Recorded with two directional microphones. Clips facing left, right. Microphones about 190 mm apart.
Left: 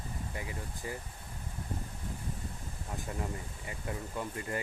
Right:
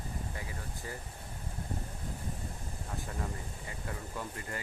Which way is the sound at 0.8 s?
15° left (ahead or behind).